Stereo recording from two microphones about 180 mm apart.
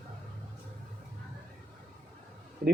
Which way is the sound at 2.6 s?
70° right (ahead or behind).